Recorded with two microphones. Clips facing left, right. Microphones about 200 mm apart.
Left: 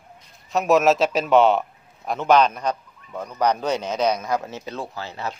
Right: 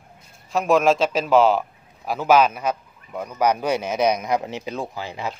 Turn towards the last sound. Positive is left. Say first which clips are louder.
# right 1 dB
turn(degrees=-15)  # may be behind; listen again after turning